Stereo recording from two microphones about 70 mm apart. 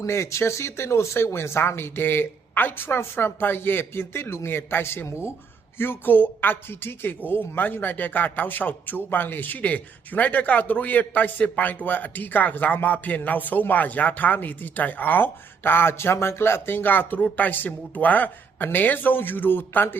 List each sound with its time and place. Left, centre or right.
0.0 s speech: left